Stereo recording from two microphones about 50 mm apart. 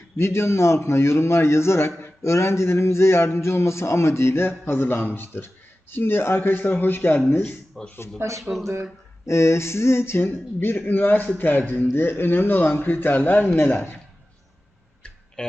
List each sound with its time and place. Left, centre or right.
0.2 s a man's voice: left
7.8 s speech: centre
8.5 s speech: right
9.2 s a man's voice: left
10.2 s a man's voice: left
15.4 s a sound: centre